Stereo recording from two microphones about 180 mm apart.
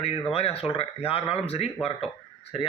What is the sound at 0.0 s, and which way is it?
Speech, 35° left (ahead or behind).